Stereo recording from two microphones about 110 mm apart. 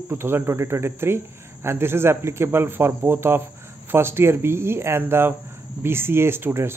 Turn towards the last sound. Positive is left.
turn(degrees=-20)  # may be behind; listen again after turning